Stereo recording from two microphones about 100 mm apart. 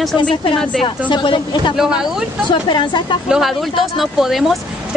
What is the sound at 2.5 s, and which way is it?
Speech, 50° left (ahead or behind).